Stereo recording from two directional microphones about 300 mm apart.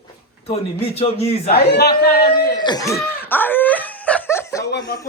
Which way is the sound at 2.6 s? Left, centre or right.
Centre.